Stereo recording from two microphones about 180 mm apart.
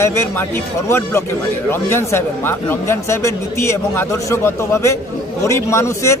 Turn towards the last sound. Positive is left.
turn(degrees=15)  # may be behind; listen again after turning